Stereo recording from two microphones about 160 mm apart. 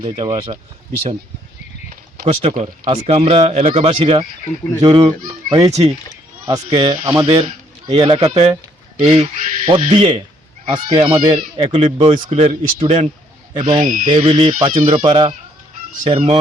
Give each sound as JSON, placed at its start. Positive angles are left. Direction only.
{"t": 0.0, "sound": "speech", "side_deg": -35}
{"t": 2.2, "sound": "speech", "side_deg": -40}
{"t": 7.4, "sound": "a man's voice", "side_deg": -35}
{"t": 14.9, "sound": "speech", "side_deg": -30}